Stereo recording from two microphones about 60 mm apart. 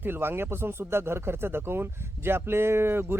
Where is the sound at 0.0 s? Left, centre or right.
Right.